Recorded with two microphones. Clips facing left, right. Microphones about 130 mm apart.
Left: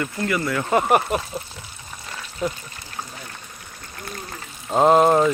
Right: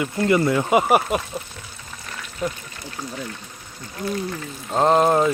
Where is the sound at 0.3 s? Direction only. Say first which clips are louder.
Right 7 dB; 25° right (ahead or behind).